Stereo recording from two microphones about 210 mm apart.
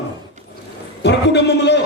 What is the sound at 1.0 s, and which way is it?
Speech, 55° left (ahead or behind).